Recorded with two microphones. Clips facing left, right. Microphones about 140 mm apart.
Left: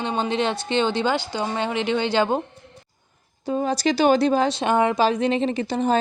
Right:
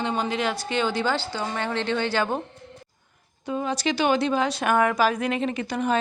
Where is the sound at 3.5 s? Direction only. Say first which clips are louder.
Left 4 dB; 35° left (ahead or behind).